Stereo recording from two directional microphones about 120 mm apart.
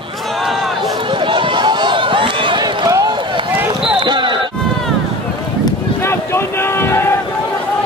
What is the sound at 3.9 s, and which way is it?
Basketball bounce, 40° right (ahead or behind).